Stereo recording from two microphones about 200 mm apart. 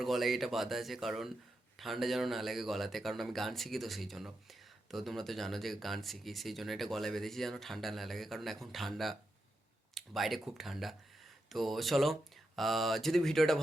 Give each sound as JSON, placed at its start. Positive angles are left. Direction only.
{"t": 0.0, "sound": "speech", "side_deg": 0}